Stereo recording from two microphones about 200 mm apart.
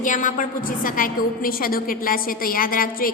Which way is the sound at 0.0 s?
40° left (ahead or behind).